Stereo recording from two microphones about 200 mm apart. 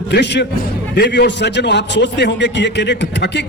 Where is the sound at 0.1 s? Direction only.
60° left (ahead or behind).